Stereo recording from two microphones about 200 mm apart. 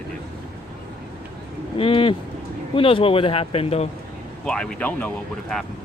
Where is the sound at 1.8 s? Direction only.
25° left (ahead or behind).